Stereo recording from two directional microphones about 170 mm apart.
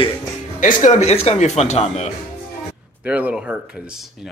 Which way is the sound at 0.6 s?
45° left (ahead or behind).